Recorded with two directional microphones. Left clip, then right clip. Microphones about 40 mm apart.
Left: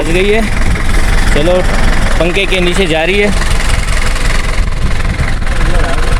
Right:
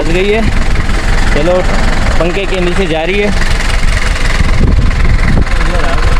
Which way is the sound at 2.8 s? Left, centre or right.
Left.